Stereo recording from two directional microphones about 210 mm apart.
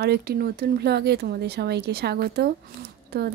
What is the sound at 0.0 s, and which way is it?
Speech, 50° right (ahead or behind).